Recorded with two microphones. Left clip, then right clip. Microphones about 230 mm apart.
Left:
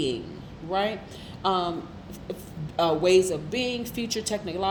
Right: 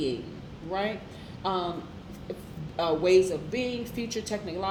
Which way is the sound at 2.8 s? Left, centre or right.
Left.